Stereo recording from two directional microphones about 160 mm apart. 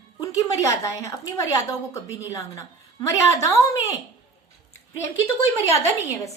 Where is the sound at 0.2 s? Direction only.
20° left (ahead or behind).